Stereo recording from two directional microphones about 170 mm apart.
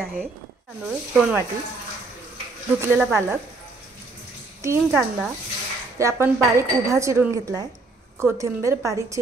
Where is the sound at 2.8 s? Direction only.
15° right (ahead or behind).